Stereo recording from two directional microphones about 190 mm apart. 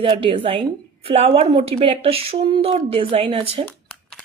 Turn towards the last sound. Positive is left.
turn(degrees=-30)  # may be behind; listen again after turning